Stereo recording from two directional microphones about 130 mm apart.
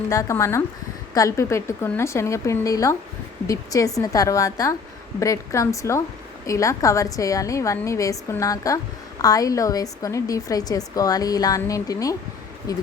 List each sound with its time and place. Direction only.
0.1 s a woman's voice: 25° left (ahead or behind)